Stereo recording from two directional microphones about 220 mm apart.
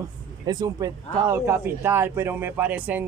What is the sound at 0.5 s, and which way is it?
Speech, 15° right (ahead or behind).